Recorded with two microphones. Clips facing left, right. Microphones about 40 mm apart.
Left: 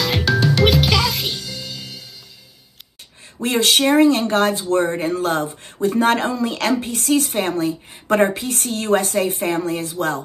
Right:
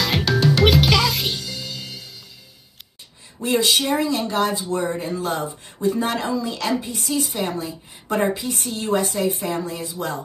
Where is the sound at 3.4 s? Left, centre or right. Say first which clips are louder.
Left 2 dB; left.